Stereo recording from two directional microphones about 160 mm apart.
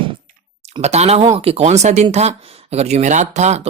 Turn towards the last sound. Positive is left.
turn(degrees=-45)  # may be behind; listen again after turning